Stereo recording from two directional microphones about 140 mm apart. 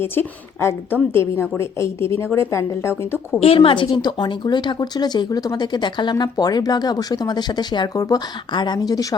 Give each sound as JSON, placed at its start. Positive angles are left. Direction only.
{"t": 0.0, "sound": "a woman's voice", "side_deg": 15}
{"t": 3.4, "sound": "speech", "side_deg": 45}